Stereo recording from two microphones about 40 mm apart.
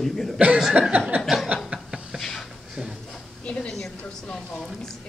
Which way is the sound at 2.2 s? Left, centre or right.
Centre.